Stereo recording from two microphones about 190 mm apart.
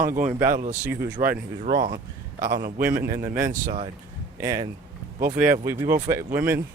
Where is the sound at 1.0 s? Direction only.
15° right (ahead or behind).